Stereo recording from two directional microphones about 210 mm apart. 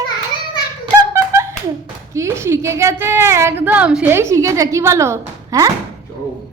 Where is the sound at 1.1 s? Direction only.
15° right (ahead or behind).